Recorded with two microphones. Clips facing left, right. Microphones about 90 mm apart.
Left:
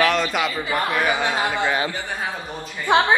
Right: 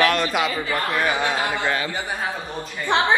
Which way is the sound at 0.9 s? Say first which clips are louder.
Right 1 dB; 10° left (ahead or behind).